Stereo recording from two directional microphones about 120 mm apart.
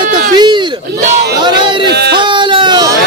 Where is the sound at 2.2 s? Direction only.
40° right (ahead or behind).